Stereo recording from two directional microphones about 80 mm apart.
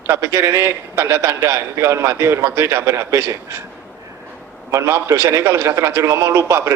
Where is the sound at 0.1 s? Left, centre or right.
Right.